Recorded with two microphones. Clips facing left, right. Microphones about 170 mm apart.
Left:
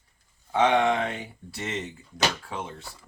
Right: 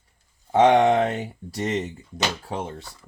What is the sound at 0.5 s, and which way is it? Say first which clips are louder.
Speech: right 6 dB; 45° right (ahead or behind).